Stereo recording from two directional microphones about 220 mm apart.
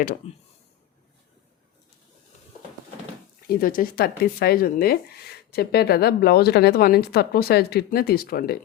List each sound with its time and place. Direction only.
0.2 s speech: 30° left (ahead or behind)
3.4 s speech: 40° left (ahead or behind)